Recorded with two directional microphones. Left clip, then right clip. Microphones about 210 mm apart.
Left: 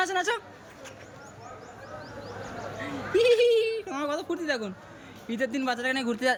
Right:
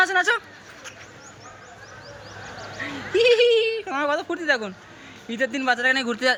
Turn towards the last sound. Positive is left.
turn(degrees=10)  # may be behind; listen again after turning